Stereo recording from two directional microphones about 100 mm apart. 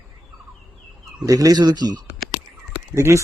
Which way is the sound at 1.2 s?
35° right (ahead or behind).